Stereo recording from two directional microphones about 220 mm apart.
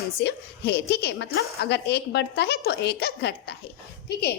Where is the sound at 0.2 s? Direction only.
45° left (ahead or behind).